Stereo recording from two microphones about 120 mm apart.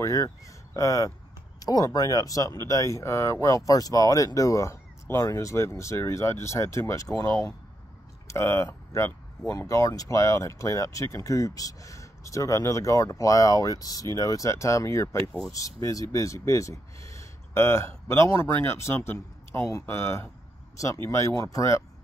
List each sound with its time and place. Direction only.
0.0 s speech: 25° left (ahead or behind)